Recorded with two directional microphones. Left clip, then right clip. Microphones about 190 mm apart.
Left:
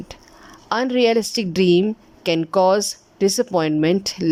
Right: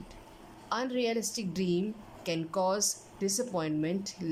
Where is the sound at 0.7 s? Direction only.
50° left (ahead or behind).